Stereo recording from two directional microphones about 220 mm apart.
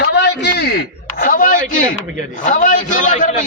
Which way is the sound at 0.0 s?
50° left (ahead or behind).